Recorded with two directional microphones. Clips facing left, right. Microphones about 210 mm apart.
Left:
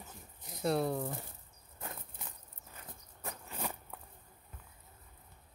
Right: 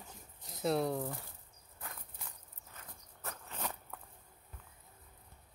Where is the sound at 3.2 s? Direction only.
10° left (ahead or behind).